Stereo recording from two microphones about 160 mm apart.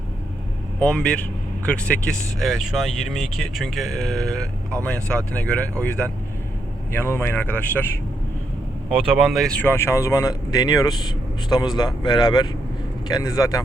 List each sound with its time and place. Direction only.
0.8 s speech: 5° left (ahead or behind)
8.9 s speech: 5° right (ahead or behind); by 13.6 s 20° left (ahead or behind)